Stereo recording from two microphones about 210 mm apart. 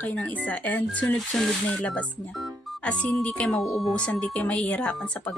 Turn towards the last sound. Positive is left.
turn(degrees=5)  # may be behind; listen again after turning